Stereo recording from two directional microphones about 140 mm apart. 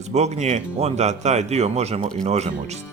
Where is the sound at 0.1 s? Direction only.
50° right (ahead or behind).